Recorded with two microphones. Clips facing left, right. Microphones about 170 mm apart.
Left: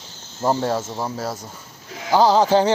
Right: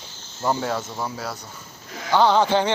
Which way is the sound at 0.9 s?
20° left (ahead or behind).